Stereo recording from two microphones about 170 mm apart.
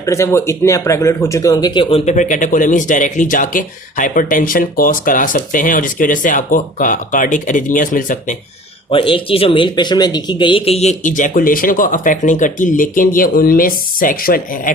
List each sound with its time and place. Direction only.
0.0 s speech: 15° left (ahead or behind)
2.0 s speech: 45° left (ahead or behind)
8.9 s speech: 30° left (ahead or behind); by 14.7 s 60° left (ahead or behind)